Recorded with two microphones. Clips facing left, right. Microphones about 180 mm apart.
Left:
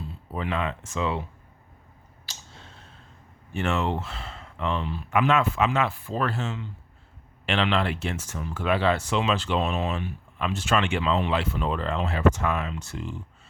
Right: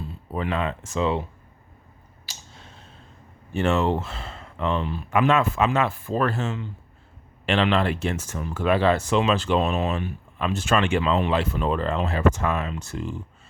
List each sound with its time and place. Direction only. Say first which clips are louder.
0.3 s speech: right 3 dB; 40° right (ahead or behind)
2.3 s a sound: even; 10° right (ahead or behind)
3.5 s speech: right 5 dB; 35° right (ahead or behind)